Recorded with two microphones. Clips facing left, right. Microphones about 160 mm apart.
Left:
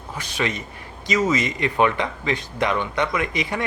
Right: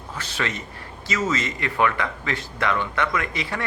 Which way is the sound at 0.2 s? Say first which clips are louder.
Left 3 dB; 15° left (ahead or behind).